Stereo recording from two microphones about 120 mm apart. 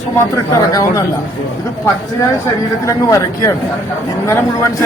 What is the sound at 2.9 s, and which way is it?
A man's voice, 25° left (ahead or behind).